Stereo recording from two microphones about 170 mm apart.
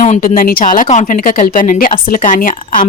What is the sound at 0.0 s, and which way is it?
Speech, 50° left (ahead or behind).